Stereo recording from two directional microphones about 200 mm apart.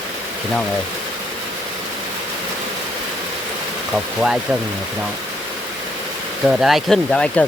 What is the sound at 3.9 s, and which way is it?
Speech, 5° right (ahead or behind).